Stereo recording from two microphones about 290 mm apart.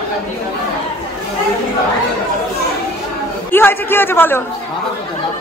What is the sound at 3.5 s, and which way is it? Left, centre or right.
Speech, centre.